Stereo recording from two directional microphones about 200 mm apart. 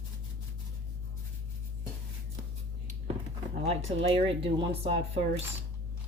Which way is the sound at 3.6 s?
30° right (ahead or behind).